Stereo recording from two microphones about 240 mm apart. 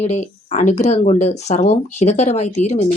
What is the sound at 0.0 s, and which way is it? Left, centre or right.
A woman's voice, left.